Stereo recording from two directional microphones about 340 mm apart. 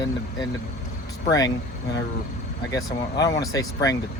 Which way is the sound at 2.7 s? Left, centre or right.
Centre.